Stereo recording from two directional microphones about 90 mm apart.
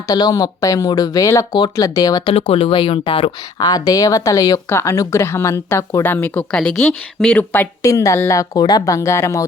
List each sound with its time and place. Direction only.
0.1 s speech: 45° left (ahead or behind)
2.2 s speech: 90° left
3.0 s speech: 80° left
3.6 s speech: 45° left (ahead or behind); by 7.4 s 10° left (ahead or behind)
7.8 s speech: 40° left (ahead or behind)